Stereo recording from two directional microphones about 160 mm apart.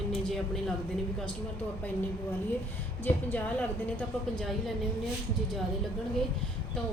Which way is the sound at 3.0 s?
10° left (ahead or behind).